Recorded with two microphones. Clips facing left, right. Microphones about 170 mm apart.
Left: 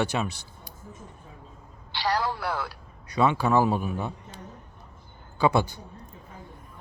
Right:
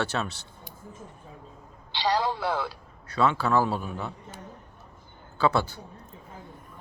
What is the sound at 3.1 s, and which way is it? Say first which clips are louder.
Speech: left 1 dB; 15° left (ahead or behind).